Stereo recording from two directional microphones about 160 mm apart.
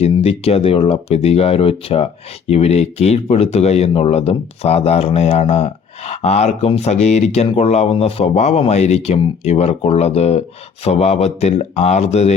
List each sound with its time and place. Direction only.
0.0 s speech: 40° left (ahead or behind)